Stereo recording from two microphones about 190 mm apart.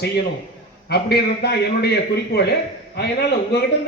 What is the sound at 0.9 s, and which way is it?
A man's voice, 60° left (ahead or behind).